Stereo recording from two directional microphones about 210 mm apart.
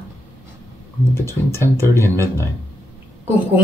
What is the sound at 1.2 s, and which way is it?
Speech, 10° left (ahead or behind).